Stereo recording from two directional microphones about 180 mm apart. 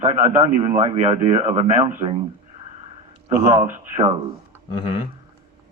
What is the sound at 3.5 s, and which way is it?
Speech, 35° right (ahead or behind).